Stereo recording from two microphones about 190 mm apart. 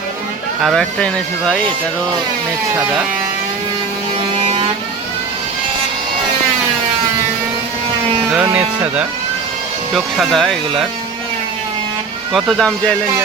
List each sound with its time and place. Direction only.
0.6 s speech: centre (ahead or behind)
2.7 s speech: 5° right (ahead or behind)
4.4 s vehicle: 30° right (ahead or behind)
8.3 s speech: 5° right (ahead or behind)
9.9 s speech: centre (ahead or behind)
12.3 s speech: centre (ahead or behind)